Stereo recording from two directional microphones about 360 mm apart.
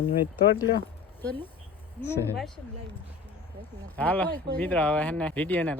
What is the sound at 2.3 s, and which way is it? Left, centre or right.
Speech, centre.